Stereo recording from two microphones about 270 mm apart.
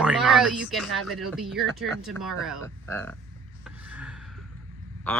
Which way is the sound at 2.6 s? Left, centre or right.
Centre.